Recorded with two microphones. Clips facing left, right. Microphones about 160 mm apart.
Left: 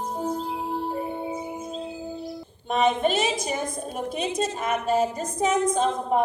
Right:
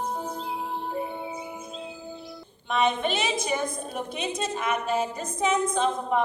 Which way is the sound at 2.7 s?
40° left (ahead or behind).